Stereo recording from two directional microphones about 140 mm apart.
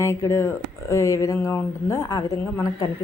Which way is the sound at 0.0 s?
20° left (ahead or behind).